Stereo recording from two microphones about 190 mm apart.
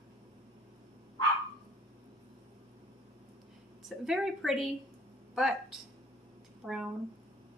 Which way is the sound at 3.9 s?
Centre (ahead or behind).